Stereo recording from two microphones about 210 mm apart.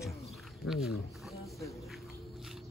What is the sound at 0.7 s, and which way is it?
Speech, centre (ahead or behind).